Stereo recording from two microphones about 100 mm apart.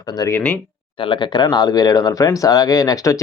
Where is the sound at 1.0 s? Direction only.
50° left (ahead or behind).